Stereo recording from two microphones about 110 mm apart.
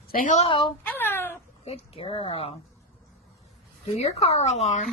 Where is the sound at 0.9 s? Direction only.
20° left (ahead or behind).